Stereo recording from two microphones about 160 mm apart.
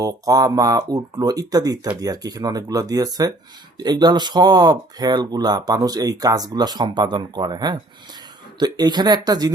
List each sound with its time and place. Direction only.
0.0 s speech: 20° right (ahead or behind)